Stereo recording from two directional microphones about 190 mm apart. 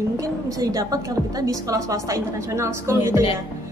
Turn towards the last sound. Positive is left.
turn(degrees=-15)  # may be behind; listen again after turning